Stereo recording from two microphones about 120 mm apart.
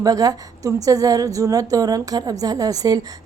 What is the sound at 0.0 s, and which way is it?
A woman's voice, 30° right (ahead or behind).